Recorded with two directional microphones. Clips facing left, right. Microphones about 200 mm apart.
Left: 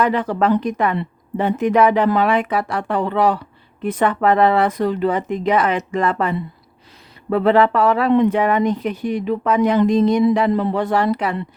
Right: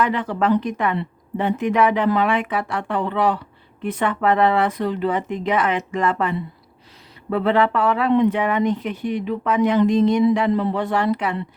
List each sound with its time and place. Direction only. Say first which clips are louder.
0.0 s speech: left 3 dB; 40° left (ahead or behind)